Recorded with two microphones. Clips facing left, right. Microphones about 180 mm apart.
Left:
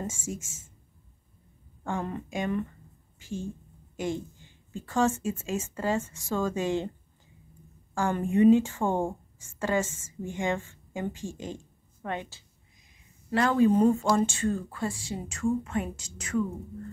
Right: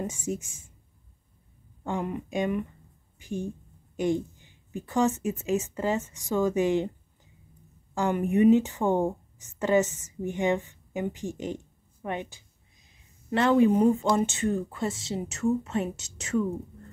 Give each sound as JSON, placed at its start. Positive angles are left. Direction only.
{"t": 0.0, "sound": "speech", "side_deg": -20}
{"t": 1.9, "sound": "a woman's voice", "side_deg": -15}
{"t": 7.9, "sound": "a woman's voice", "side_deg": -20}